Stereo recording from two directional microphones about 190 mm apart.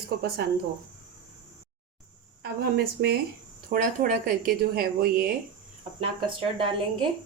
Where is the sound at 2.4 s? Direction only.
55° right (ahead or behind).